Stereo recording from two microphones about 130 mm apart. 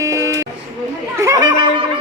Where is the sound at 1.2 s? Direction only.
25° right (ahead or behind).